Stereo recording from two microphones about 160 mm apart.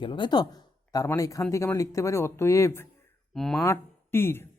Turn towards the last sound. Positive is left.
turn(degrees=15)  # may be behind; listen again after turning